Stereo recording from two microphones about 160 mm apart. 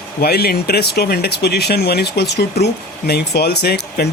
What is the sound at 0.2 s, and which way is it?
Speech, 80° left.